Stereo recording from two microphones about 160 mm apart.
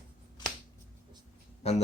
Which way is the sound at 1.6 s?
40° left (ahead or behind).